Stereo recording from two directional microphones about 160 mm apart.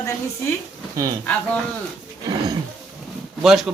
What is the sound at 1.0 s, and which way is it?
Speech, 20° right (ahead or behind).